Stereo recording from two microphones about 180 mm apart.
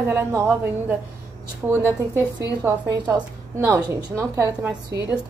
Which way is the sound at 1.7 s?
15° right (ahead or behind).